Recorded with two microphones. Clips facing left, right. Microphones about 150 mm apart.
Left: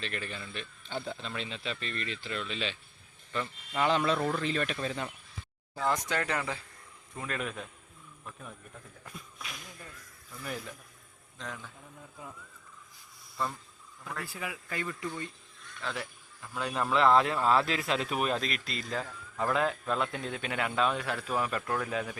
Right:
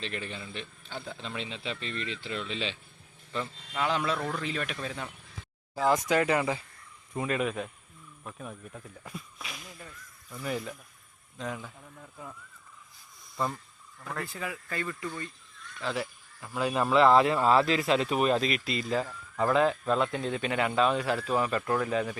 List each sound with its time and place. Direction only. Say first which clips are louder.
0.0 s speech: right 1 dB; 25° right (ahead or behind)
0.9 s speech: left 3 dB; 5° left (ahead or behind)
1.2 s speech: right 1 dB; 20° right (ahead or behind)
3.8 s speech: left 2 dB; 5° right (ahead or behind)
9.0 s a sound: right 1 dB; centre (ahead or behind)
11.3 s speech: right 6 dB; 10° right (ahead or behind)
14.2 s speech: right 3 dB; 10° left (ahead or behind)
15.8 s speech: right 5 dB; 5° right (ahead or behind)